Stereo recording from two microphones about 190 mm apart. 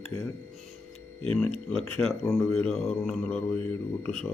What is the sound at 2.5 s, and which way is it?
Mantra, centre (ahead or behind).